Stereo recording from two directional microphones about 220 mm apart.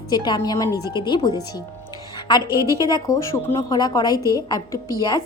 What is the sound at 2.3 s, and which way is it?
Speech, 20° left (ahead or behind).